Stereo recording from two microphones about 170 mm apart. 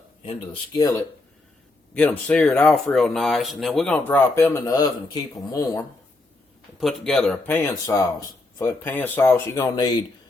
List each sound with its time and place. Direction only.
0.2 s speech: 35° left (ahead or behind)
0.8 s speech: 20° left (ahead or behind)
1.9 s speech: 10° left (ahead or behind)
6.7 s speech: centre (ahead or behind); by 9.9 s 20° left (ahead or behind)